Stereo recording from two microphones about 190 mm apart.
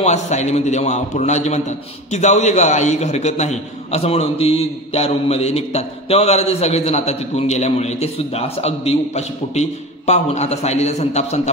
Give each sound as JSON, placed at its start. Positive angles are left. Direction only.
{"t": 0.0, "sound": "a man's voice", "side_deg": 35}